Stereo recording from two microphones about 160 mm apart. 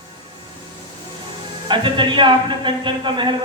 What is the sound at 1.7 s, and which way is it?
A man's voice, 30° right (ahead or behind).